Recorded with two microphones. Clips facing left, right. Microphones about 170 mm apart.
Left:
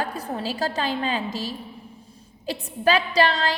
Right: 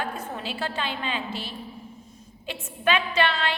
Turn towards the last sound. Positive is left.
turn(degrees=35)  # may be behind; listen again after turning